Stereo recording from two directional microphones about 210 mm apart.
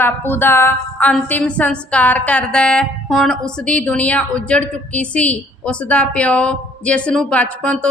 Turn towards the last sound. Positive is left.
turn(degrees=5)  # may be behind; listen again after turning